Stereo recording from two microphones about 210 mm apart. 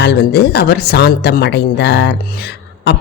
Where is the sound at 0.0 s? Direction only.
50° left (ahead or behind).